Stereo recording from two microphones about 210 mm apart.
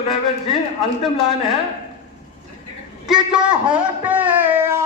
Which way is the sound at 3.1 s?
5° right (ahead or behind).